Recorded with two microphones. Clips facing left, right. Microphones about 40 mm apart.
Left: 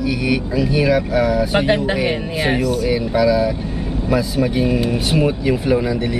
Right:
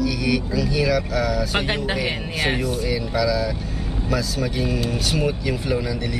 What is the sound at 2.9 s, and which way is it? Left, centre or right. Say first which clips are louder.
Speech: left 6 dB; left.